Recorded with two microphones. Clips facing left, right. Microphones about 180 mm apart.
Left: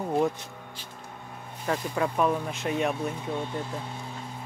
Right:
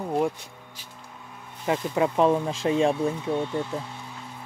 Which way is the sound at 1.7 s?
25° right (ahead or behind).